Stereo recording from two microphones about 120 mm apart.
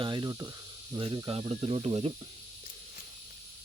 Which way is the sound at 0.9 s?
45° right (ahead or behind).